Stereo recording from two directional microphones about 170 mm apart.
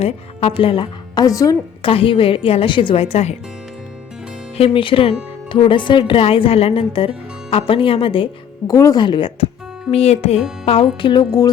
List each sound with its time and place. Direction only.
0.0 s a woman's voice: 35° left (ahead or behind); by 1.5 s 20° left (ahead or behind)
1.8 s a woman's voice: 30° left (ahead or behind)
4.5 s a woman's voice: 35° left (ahead or behind)
8.7 s a woman's voice: 20° left (ahead or behind); by 10.4 s 40° left (ahead or behind)
10.9 s a woman's voice: 30° left (ahead or behind)